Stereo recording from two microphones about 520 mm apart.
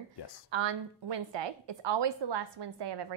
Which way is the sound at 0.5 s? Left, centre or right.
Right.